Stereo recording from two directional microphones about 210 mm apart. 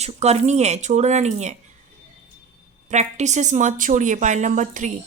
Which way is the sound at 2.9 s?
35° right (ahead or behind).